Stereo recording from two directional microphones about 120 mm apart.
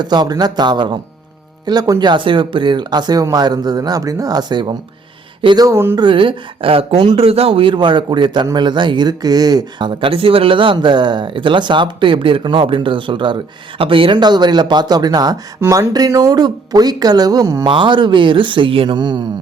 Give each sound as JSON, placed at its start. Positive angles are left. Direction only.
{"t": 0.0, "sound": "speech", "side_deg": -35}
{"t": 5.6, "sound": "speech", "side_deg": -20}
{"t": 6.0, "sound": "speech", "side_deg": -45}
{"t": 17.7, "sound": "speech", "side_deg": -40}